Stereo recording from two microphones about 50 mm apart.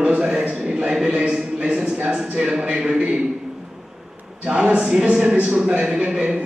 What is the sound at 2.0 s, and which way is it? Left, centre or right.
A man's voice, centre.